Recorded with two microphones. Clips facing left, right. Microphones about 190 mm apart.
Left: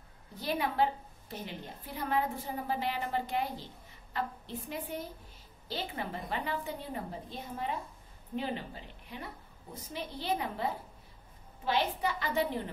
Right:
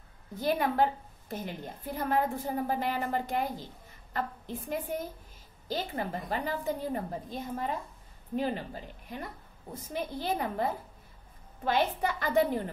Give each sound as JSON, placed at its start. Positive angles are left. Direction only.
{"t": 0.4, "sound": "a woman's voice", "side_deg": -50}